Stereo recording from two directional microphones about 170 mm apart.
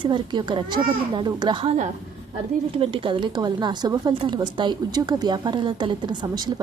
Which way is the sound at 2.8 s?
30° right (ahead or behind).